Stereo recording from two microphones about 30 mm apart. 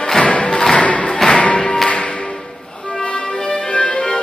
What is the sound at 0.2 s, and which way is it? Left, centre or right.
Music, left.